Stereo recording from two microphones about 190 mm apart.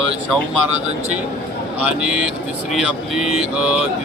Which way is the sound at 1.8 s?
5° right (ahead or behind).